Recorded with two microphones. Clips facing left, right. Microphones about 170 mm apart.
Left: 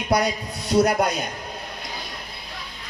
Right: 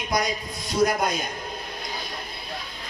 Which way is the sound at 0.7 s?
70° left (ahead or behind).